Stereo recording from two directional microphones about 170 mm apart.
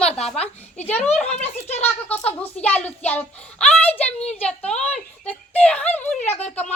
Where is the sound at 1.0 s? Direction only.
40° left (ahead or behind).